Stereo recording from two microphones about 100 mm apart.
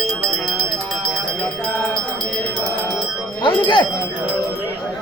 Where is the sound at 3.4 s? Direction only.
55° left (ahead or behind).